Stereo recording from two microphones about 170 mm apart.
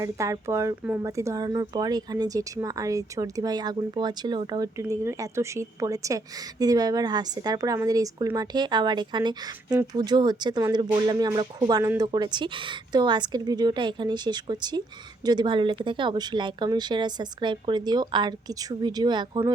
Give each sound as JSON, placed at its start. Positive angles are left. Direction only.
{"t": 0.0, "sound": "speech", "side_deg": -20}